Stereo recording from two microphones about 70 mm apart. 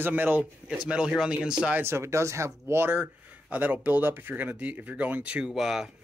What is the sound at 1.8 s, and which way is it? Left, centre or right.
Speech, right.